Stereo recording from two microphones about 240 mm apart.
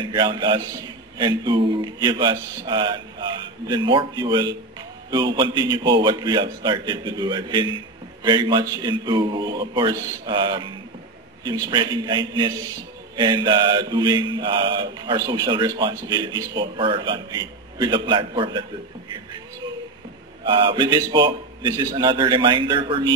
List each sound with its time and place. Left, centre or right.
0.0 s mantra: centre
5.1 s a man's voice: centre
13.1 s mantra: centre
20.4 s mantra: centre